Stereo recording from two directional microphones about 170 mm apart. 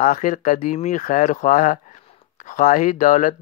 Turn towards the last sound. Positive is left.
turn(degrees=50)  # may be behind; listen again after turning